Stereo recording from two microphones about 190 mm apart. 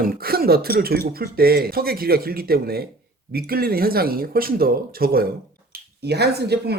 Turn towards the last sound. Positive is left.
turn(degrees=-60)  # may be behind; listen again after turning